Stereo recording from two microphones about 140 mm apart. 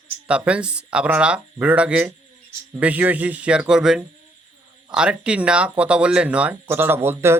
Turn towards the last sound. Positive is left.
turn(degrees=-15)  # may be behind; listen again after turning